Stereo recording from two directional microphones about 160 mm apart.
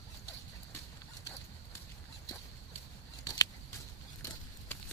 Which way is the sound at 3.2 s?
20° left (ahead or behind).